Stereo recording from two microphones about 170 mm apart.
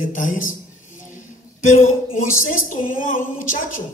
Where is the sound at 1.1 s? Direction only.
50° left (ahead or behind).